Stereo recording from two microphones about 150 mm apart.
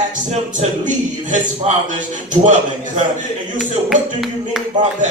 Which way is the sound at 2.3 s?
55° right (ahead or behind).